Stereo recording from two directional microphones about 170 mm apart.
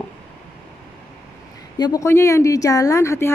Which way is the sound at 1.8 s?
20° left (ahead or behind).